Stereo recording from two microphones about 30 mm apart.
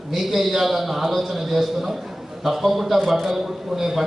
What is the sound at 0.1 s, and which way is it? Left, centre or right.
A man's voice, centre.